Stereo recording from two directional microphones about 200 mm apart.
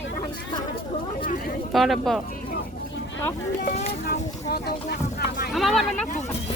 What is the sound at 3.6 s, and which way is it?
Speech, 40° left (ahead or behind).